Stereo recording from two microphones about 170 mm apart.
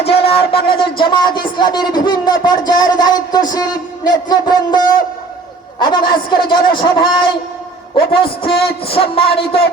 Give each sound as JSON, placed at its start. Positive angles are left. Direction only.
{"t": 0.0, "sound": "a sound", "side_deg": 35}
{"t": 0.7, "sound": "a man's voice", "side_deg": 30}
{"t": 5.8, "sound": "a man's voice", "side_deg": 25}